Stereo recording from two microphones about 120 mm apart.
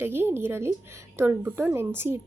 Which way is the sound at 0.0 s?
20° right (ahead or behind).